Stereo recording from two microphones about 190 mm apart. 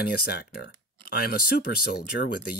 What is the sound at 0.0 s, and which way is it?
Speech, 55° left (ahead or behind).